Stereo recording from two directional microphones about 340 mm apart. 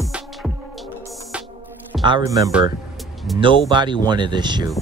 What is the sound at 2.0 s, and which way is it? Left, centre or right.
Speech, centre.